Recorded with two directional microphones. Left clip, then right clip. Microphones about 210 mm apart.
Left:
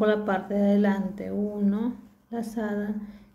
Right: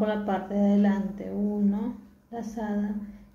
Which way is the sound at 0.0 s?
40° left (ahead or behind).